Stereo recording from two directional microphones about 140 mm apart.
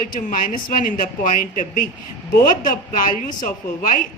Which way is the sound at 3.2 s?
70° left (ahead or behind).